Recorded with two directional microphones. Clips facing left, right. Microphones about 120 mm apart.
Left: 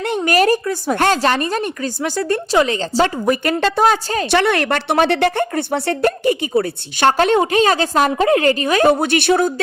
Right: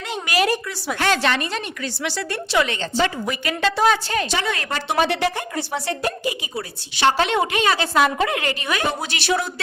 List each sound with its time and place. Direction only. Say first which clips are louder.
0.0 s a woman's voice: left 7 dB; 50° left (ahead or behind)
4.3 s a woman's voice: left 9 dB; 65° left (ahead or behind)